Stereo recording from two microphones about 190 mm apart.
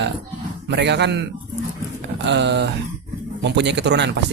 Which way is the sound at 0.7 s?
65° right (ahead or behind).